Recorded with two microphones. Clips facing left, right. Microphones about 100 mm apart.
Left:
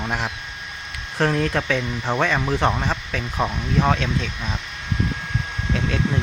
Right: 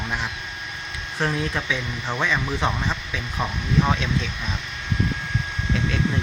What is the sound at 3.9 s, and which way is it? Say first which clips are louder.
Speech: left 2 dB; 45° left (ahead or behind).